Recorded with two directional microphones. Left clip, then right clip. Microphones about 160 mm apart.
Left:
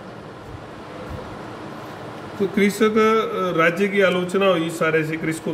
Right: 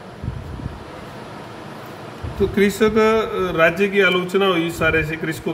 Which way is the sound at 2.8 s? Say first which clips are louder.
Even; 30° right (ahead or behind).